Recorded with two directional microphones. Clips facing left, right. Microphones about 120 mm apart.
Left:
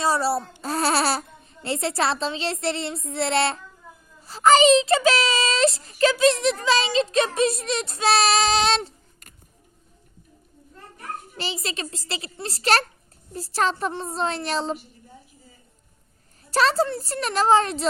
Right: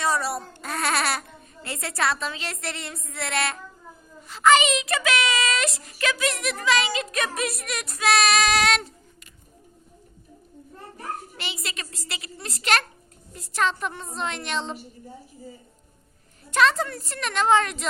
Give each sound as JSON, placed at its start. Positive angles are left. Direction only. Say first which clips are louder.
{"t": 0.0, "sound": "a sound", "louder": "left 3 dB", "side_deg": 30}
{"t": 1.6, "sound": "a child's voice", "louder": "left 3 dB", "side_deg": 30}
{"t": 11.3, "sound": "a woman's voice", "louder": "left 5 dB", "side_deg": 30}
{"t": 16.5, "sound": "a woman's voice", "louder": "left 1 dB", "side_deg": 35}